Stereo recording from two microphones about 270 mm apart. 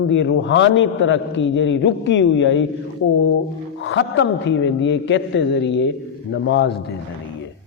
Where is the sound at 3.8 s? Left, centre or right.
Left.